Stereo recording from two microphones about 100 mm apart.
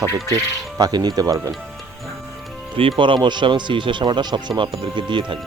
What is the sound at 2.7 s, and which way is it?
Speech, 60° right (ahead or behind).